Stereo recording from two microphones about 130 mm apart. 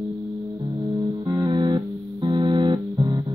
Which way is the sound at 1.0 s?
35° right (ahead or behind).